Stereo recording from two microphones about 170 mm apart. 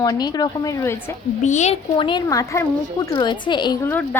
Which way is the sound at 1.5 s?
45° left (ahead or behind).